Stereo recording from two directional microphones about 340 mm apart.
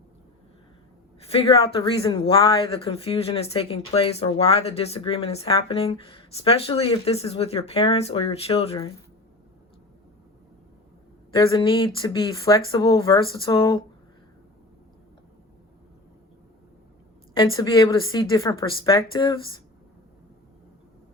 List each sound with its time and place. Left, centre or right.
1.3 s speech: centre
11.5 s speech: centre
17.3 s speech: centre